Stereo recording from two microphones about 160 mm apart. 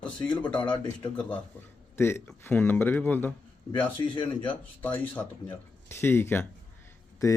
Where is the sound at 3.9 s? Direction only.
30° left (ahead or behind).